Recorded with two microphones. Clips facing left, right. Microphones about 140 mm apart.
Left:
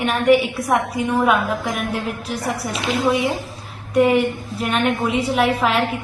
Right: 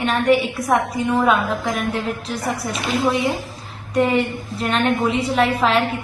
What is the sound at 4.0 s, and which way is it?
A woman's voice, 10° left (ahead or behind).